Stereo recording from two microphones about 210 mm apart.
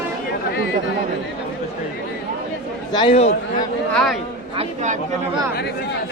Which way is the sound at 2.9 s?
25° left (ahead or behind).